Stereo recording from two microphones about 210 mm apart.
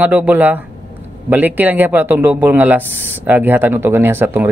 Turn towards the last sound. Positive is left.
turn(degrees=-10)  # may be behind; listen again after turning